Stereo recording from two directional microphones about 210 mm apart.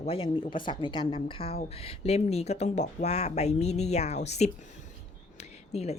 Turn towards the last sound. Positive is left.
turn(degrees=30)  # may be behind; listen again after turning